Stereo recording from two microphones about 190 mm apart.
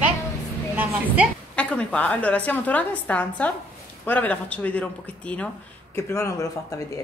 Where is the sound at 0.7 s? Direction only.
10° right (ahead or behind).